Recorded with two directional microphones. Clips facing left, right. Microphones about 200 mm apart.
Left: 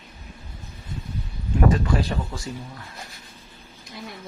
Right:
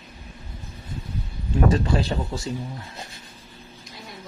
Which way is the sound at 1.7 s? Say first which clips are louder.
Right 1 dB; 25° right (ahead or behind).